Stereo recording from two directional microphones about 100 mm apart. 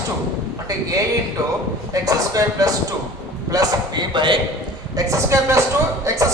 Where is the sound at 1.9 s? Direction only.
35° right (ahead or behind); by 4.4 s 50° right (ahead or behind).